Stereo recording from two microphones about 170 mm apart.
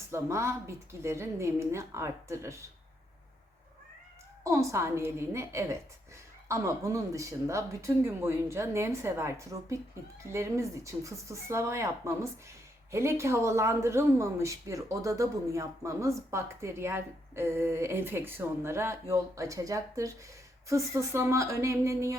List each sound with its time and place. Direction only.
0.1 s speech: 15° right (ahead or behind)
4.4 s speech: 15° right (ahead or behind)